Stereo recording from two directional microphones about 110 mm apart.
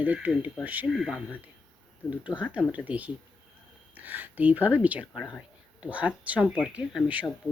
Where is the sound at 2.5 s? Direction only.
10° right (ahead or behind).